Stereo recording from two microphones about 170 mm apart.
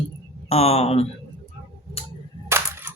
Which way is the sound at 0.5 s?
40° left (ahead or behind).